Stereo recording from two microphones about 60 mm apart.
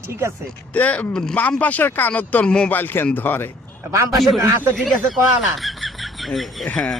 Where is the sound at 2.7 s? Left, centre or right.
Left.